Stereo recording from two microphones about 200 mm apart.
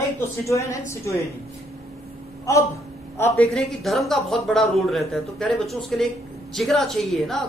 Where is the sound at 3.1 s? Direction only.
5° left (ahead or behind).